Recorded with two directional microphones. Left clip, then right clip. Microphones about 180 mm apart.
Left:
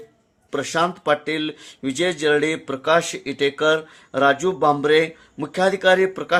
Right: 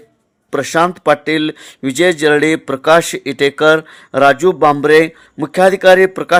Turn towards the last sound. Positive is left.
turn(degrees=-40)  # may be behind; listen again after turning